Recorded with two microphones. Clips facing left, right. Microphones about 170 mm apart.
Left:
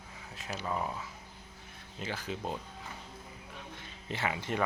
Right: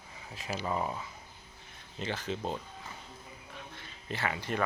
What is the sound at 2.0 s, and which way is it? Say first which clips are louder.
Speech: right 2 dB; 5° left (ahead or behind).